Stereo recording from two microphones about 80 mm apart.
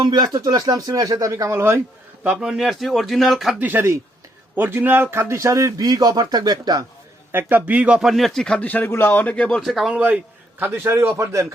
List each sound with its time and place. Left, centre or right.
0.0 s speech: right
2.3 s a man's voice: centre
3.6 s speech: right
5.1 s speech: right
7.6 s speech: centre
8.1 s a man's voice: centre
8.6 s speech: left
9.6 s a man's voice: centre
9.9 s speech: centre
10.8 s speech: right